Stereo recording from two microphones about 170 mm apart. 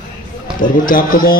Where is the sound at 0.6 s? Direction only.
55° left (ahead or behind).